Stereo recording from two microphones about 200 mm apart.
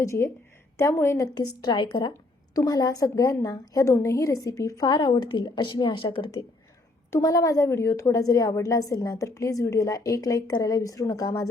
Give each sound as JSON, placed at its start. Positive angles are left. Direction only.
{"t": 0.0, "sound": "a woman's voice", "side_deg": 15}